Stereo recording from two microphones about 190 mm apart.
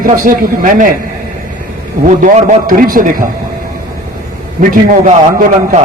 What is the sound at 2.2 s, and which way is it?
A man's voice, 40° right (ahead or behind).